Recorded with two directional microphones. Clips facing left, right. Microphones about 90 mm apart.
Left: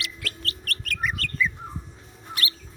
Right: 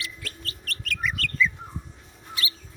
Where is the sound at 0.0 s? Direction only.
70° left (ahead or behind); by 1.3 s 40° left (ahead or behind).